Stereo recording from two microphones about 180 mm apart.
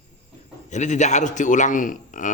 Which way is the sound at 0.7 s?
40° left (ahead or behind).